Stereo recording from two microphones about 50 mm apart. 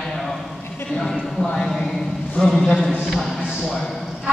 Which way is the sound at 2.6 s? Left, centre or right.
Centre.